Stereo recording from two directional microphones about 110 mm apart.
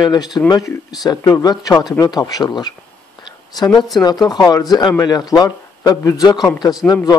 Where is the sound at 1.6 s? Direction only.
35° left (ahead or behind).